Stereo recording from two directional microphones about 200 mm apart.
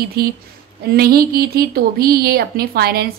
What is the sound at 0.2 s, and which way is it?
A woman's voice, 50° right (ahead or behind).